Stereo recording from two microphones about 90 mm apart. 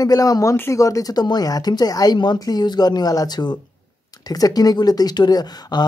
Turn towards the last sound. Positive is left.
turn(degrees=50)  # may be behind; listen again after turning